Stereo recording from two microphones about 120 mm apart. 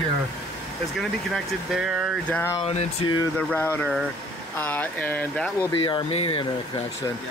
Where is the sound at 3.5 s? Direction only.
15° left (ahead or behind).